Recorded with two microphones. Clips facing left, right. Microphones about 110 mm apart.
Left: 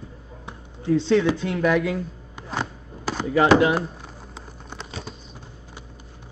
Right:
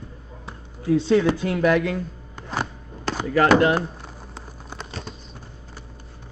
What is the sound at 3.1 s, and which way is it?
Chop, 5° left (ahead or behind).